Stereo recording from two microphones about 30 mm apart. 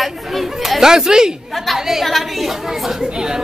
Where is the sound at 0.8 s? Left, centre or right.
Centre.